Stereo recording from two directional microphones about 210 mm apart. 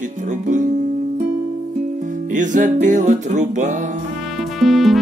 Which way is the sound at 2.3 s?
35° right (ahead or behind).